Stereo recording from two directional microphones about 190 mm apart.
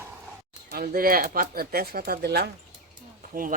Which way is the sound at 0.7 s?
50° right (ahead or behind).